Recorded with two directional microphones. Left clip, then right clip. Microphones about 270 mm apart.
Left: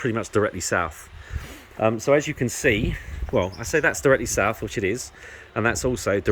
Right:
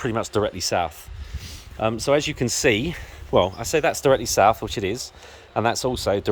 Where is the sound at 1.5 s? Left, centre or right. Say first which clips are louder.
Left 2 dB; centre.